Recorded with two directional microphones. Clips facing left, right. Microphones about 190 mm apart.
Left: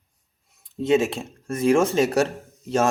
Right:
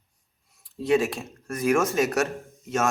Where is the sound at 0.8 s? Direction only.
25° left (ahead or behind).